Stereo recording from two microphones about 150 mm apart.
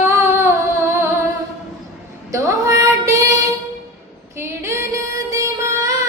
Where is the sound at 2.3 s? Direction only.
20° right (ahead or behind).